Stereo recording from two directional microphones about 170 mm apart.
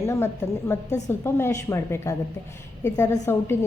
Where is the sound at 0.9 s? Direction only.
45° left (ahead or behind).